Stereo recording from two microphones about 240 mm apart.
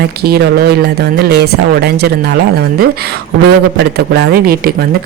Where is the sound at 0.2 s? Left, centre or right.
Right.